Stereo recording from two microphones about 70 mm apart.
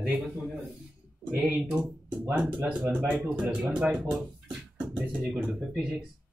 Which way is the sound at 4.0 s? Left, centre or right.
Centre.